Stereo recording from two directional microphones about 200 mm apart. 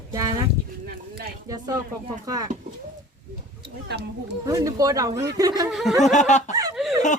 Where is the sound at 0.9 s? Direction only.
50° right (ahead or behind).